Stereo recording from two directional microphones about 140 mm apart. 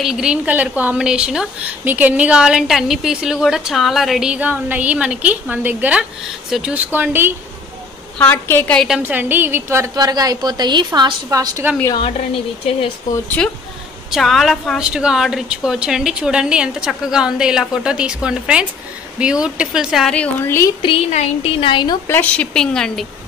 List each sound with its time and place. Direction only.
0.0 s a woman's voice: 5° right (ahead or behind)
6.9 s a woman's voice: 15° right (ahead or behind)
8.2 s speech: 15° left (ahead or behind)
8.7 s a woman's voice: 5° right (ahead or behind)
9.0 s a woman's voice: 15° right (ahead or behind)
13.4 s a woman's voice: 10° left (ahead or behind)
20.2 s speech: 15° left (ahead or behind)
20.8 s a woman's voice: 50° left (ahead or behind)
22.0 s speech: 15° left (ahead or behind)